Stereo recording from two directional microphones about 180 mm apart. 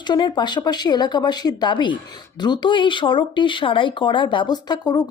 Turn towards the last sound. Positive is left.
turn(degrees=20)  # may be behind; listen again after turning